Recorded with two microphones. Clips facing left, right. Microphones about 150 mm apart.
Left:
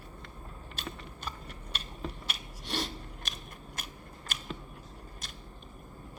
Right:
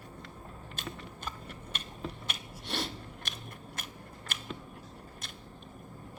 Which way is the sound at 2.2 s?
55° right (ahead or behind).